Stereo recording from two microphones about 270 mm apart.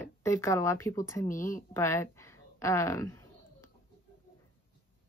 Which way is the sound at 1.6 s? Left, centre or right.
Centre.